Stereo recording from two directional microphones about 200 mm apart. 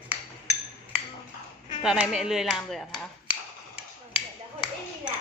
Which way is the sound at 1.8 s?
5° right (ahead or behind).